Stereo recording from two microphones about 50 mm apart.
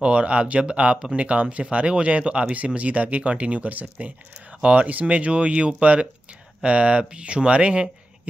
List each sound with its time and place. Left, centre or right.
0.0 s speech: right